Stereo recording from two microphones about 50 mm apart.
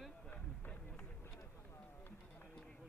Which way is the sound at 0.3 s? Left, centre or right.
Left.